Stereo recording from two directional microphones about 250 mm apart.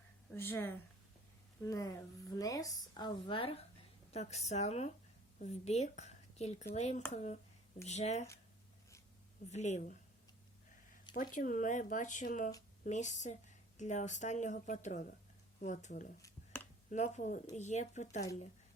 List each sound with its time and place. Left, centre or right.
0.3 s a woman's voice: centre; by 8.3 s left
9.5 s speech: left
11.1 s speech: left
16.2 s a sound: centre
16.9 s speech: left